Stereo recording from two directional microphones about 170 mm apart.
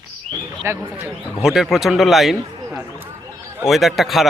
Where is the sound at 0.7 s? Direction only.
15° right (ahead or behind).